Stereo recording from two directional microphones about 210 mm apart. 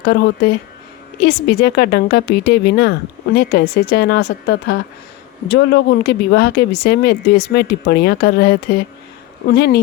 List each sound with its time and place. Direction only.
0.0 s speech: 50° left (ahead or behind)